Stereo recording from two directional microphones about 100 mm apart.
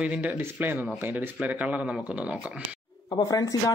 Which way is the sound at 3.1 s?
40° left (ahead or behind).